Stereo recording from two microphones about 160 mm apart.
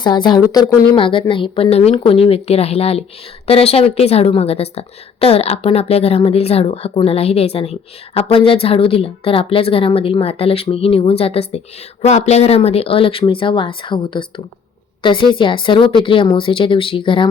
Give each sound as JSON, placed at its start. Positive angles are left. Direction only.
{"t": 0.0, "sound": "speech", "side_deg": 25}
{"t": 0.9, "sound": "a woman's voice", "side_deg": 30}